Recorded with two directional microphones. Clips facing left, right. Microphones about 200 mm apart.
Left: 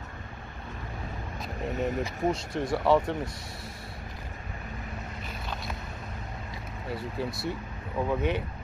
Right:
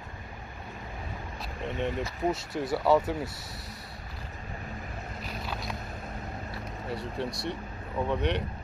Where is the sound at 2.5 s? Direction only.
5° right (ahead or behind).